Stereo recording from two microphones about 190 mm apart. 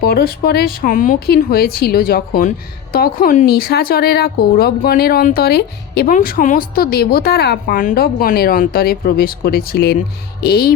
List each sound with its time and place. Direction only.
0.0 s speech: 55° left (ahead or behind)